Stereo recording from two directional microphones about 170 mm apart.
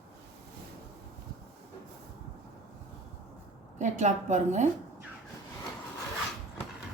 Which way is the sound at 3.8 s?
45° right (ahead or behind).